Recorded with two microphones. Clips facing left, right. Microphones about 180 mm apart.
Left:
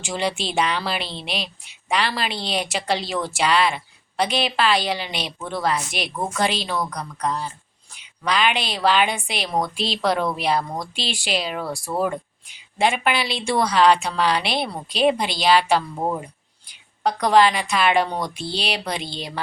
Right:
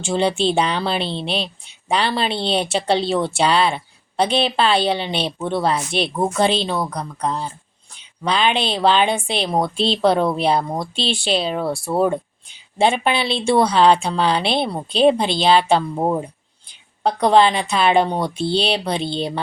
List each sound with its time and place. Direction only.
0.0 s speech: 30° right (ahead or behind)